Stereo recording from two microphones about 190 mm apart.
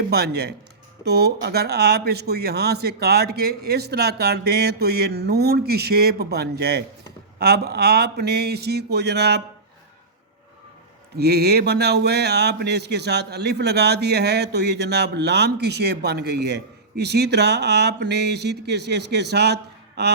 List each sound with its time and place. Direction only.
0.1 s speech: 60° right (ahead or behind)
11.2 s speech: 60° right (ahead or behind)